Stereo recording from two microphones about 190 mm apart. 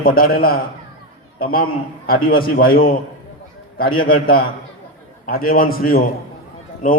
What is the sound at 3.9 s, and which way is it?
A man's voice, 50° left (ahead or behind).